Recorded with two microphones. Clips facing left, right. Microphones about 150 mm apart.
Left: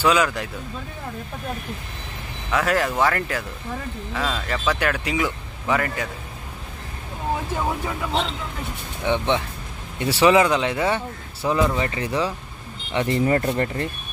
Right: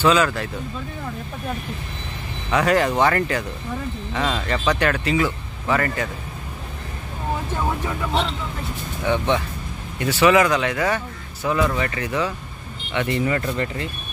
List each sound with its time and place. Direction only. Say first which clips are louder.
0.0 s speech: right 2 dB; 10° left (ahead or behind)
2.5 s speech: right 3 dB; centre (ahead or behind)
9.1 s speech: right 1 dB; 25° left (ahead or behind); by 13.8 s 45° left (ahead or behind)